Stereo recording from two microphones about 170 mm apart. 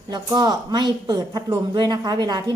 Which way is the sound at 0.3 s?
25° right (ahead or behind).